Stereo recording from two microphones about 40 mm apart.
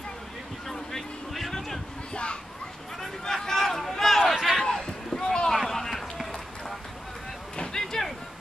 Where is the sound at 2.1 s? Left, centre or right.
Left.